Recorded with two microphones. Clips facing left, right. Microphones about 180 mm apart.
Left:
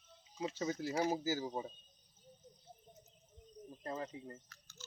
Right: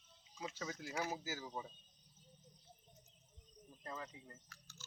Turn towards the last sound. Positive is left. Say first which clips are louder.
# left 1 dB
turn(degrees=-15)  # may be behind; listen again after turning